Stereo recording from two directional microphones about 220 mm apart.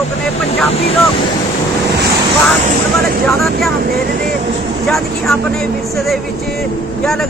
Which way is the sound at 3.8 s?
45° right (ahead or behind).